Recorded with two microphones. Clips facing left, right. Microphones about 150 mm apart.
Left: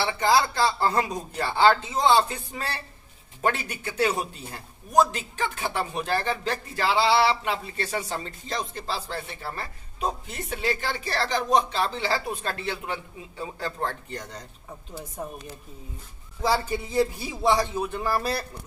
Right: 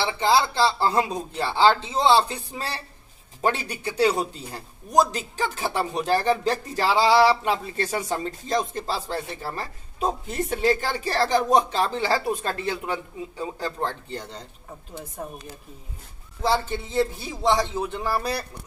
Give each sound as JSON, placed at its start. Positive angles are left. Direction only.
{"t": 0.0, "sound": "a man's voice", "side_deg": -25}
{"t": 0.7, "sound": "speech", "side_deg": -10}
{"t": 1.0, "sound": "a man's voice", "side_deg": -25}
{"t": 16.4, "sound": "speech", "side_deg": 0}